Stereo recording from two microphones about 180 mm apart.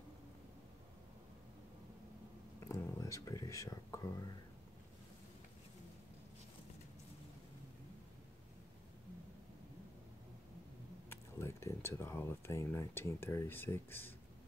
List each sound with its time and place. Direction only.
2.7 s speech: 15° left (ahead or behind)
11.1 s speech: 15° left (ahead or behind)